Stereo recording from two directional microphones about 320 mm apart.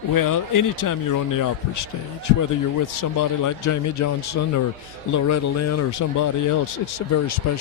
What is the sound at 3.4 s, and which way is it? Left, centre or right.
A man's voice, left.